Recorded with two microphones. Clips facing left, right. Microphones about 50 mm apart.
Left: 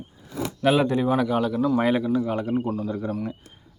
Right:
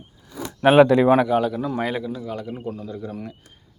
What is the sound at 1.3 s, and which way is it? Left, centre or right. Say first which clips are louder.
Speech: right 1 dB; centre.